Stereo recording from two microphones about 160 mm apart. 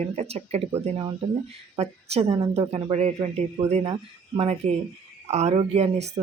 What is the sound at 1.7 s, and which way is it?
Speech, 40° right (ahead or behind).